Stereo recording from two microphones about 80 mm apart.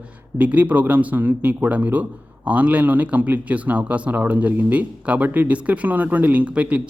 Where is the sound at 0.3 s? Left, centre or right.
Right.